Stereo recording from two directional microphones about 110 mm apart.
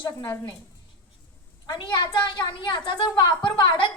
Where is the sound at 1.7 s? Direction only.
45° left (ahead or behind).